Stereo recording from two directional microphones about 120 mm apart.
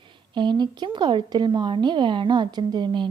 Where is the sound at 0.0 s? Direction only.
40° right (ahead or behind).